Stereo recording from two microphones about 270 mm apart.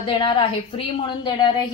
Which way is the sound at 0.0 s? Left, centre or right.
Centre.